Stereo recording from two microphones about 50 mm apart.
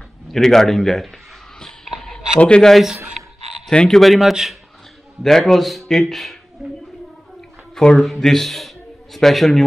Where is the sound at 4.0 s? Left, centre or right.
Centre.